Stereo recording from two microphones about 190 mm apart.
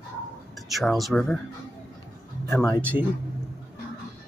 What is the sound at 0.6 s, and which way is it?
Speech, centre (ahead or behind).